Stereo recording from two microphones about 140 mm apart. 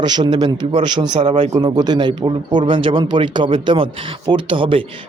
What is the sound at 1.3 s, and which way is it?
Speech, 50° right (ahead or behind).